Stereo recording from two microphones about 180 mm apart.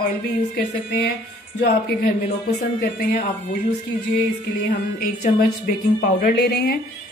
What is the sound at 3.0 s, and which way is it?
Speech, 50° left (ahead or behind).